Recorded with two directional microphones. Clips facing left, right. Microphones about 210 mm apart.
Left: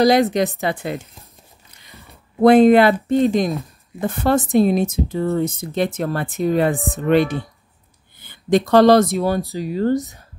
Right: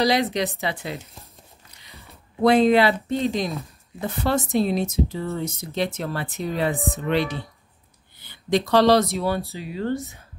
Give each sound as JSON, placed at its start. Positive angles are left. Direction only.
{"t": 0.0, "sound": "speech", "side_deg": 50}
{"t": 2.4, "sound": "speech", "side_deg": 50}